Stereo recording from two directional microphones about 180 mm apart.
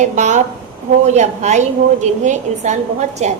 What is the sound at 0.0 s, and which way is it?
A woman's voice, 40° right (ahead or behind).